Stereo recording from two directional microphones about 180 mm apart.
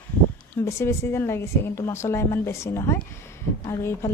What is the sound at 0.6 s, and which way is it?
A woman's voice, 15° left (ahead or behind).